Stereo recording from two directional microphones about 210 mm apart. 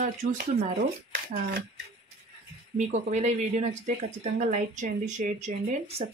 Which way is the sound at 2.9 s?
30° right (ahead or behind).